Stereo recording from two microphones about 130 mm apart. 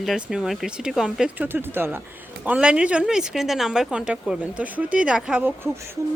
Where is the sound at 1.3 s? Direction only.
15° right (ahead or behind).